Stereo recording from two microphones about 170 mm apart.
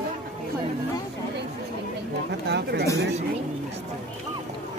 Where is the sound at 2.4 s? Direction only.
80° right.